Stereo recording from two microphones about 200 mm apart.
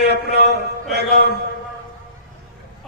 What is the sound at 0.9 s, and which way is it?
Speech, 55° right (ahead or behind).